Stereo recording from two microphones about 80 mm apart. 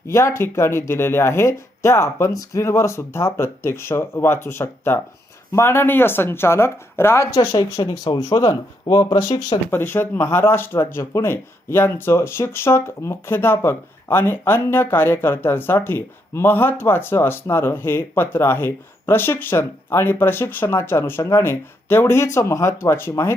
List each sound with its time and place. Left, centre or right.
0.1 s speech: left
7.3 s speech: left
9.6 s speech: left